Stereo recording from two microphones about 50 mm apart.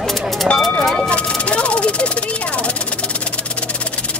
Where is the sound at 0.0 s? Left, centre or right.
Centre.